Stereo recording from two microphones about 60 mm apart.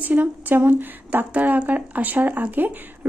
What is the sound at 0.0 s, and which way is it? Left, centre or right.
A woman's voice, right.